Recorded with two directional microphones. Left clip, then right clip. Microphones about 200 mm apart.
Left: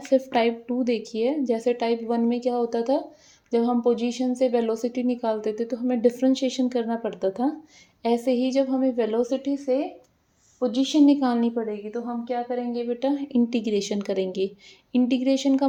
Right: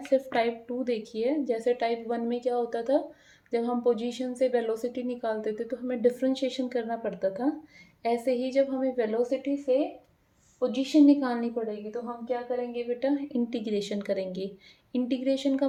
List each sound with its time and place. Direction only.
0.1 s a woman's voice: 35° left (ahead or behind)